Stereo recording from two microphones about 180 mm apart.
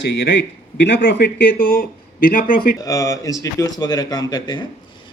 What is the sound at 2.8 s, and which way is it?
Speech, 20° left (ahead or behind).